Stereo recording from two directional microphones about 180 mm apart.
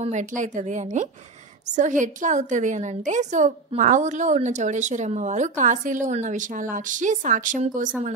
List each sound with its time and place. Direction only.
0.0 s a woman's voice: 40° right (ahead or behind)